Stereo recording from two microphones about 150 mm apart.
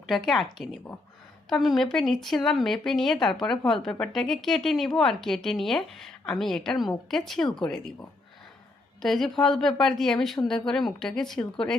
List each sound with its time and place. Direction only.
0.1 s speech: centre (ahead or behind)
1.5 s speech: centre (ahead or behind)
9.0 s speech: centre (ahead or behind)